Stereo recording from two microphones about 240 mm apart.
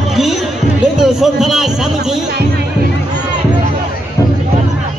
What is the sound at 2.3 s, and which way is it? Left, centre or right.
Music, right.